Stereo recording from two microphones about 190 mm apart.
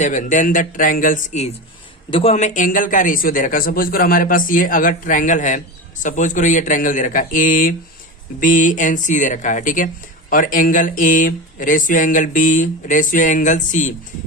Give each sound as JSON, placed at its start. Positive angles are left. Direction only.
{"t": 0.0, "sound": "a man's voice", "side_deg": 40}
{"t": 2.0, "sound": "a man's voice", "side_deg": 30}